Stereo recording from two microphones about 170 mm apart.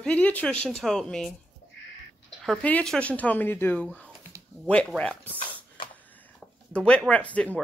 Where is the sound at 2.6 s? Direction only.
5° left (ahead or behind).